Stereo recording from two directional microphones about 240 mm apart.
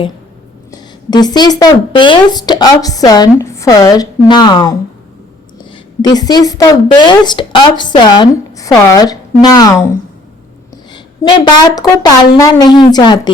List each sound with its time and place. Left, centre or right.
0.7 s speech: centre
10.9 s speech: centre